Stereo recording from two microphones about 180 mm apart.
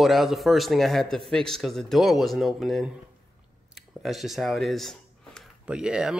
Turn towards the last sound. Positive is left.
turn(degrees=-5)  # may be behind; listen again after turning